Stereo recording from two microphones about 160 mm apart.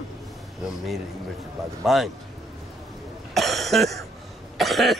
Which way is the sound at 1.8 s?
Centre (ahead or behind).